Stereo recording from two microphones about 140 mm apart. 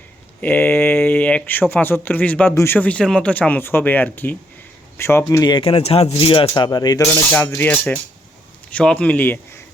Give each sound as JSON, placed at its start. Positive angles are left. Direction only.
{"t": 0.4, "sound": "speech", "side_deg": 10}
{"t": 5.5, "sound": "speech", "side_deg": 35}
{"t": 7.1, "sound": "speech", "side_deg": 15}